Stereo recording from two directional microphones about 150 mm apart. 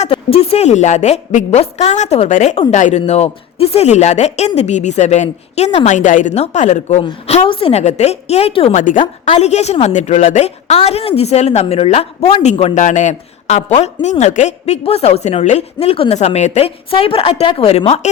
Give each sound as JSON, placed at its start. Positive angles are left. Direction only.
{"t": 0.1, "sound": "a woman's voice", "side_deg": 40}
{"t": 3.0, "sound": "a woman's voice", "side_deg": 40}
{"t": 7.0, "sound": "a woman's voice", "side_deg": 40}
{"t": 8.7, "sound": "a woman's voice", "side_deg": 60}
{"t": 9.3, "sound": "a woman's voice", "side_deg": 45}
{"t": 12.7, "sound": "a woman's voice", "side_deg": 55}
{"t": 17.7, "sound": "a woman's voice", "side_deg": 45}